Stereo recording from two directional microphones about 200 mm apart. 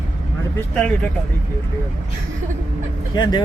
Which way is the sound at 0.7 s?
5° left (ahead or behind).